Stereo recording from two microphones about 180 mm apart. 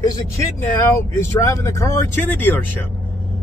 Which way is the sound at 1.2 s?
15° left (ahead or behind).